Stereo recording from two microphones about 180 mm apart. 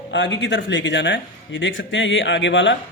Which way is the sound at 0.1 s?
90° left.